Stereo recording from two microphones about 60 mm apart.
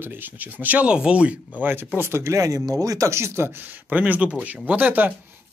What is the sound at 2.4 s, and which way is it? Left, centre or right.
Speech, right.